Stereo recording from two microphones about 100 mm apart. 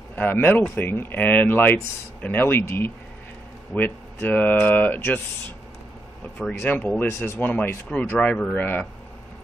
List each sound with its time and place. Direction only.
0.1 s speech: 20° left (ahead or behind)
6.6 s speech: 20° left (ahead or behind)